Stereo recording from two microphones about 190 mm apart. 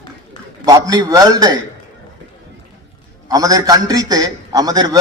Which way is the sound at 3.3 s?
20° right (ahead or behind).